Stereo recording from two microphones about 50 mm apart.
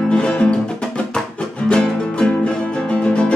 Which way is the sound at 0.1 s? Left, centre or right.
Centre.